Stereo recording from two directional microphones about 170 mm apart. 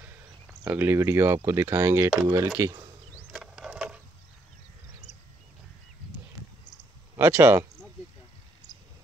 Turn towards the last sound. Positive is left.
turn(degrees=-15)  # may be behind; listen again after turning